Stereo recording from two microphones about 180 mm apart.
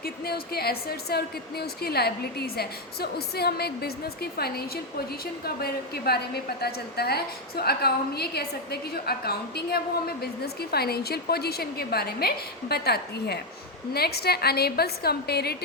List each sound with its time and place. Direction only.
0.0 s a woman's voice: 60° left (ahead or behind)